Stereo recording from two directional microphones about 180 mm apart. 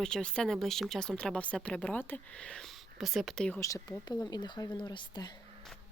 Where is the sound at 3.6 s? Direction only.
20° left (ahead or behind).